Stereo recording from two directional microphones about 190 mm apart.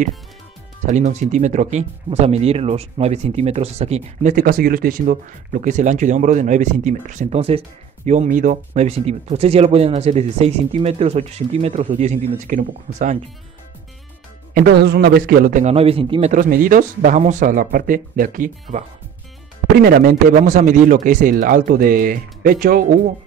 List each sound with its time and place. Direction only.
0.8 s speech: 40° right (ahead or behind)
14.5 s speech: 55° right (ahead or behind)
15.7 s speech: 30° right (ahead or behind); by 22.9 s 50° right (ahead or behind)